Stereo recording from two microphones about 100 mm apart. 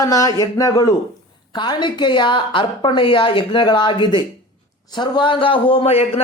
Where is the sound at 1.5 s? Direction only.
50° left (ahead or behind).